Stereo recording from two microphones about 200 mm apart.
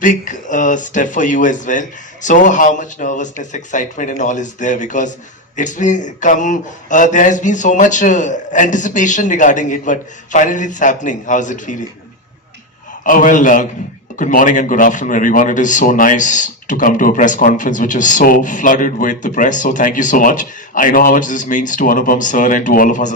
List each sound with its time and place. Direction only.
0.0 s speech: 40° left (ahead or behind)
13.1 s speech: 40° left (ahead or behind)